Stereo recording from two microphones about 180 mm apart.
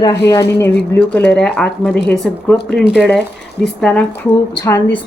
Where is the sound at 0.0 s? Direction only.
15° left (ahead or behind).